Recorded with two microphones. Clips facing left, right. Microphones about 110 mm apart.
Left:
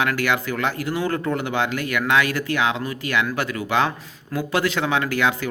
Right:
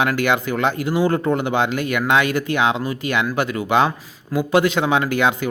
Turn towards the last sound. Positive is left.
turn(degrees=-20)  # may be behind; listen again after turning